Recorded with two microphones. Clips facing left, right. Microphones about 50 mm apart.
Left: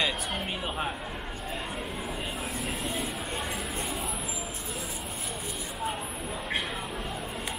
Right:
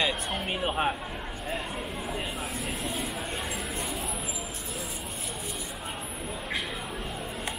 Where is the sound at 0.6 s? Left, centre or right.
Right.